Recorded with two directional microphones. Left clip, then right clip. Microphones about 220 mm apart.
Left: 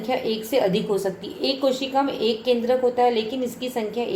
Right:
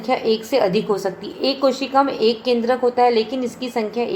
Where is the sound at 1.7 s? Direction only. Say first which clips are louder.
Right 5 dB; 55° right (ahead or behind).